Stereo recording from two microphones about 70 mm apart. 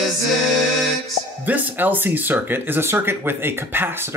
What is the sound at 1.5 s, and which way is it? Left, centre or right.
Speech, right.